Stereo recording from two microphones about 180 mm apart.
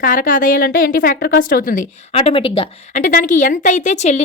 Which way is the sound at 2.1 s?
30° left (ahead or behind).